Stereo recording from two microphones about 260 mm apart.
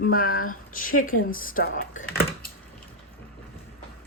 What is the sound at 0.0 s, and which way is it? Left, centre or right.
Speech, left.